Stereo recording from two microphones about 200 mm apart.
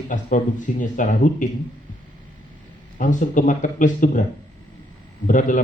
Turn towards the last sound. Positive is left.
turn(degrees=40)  # may be behind; listen again after turning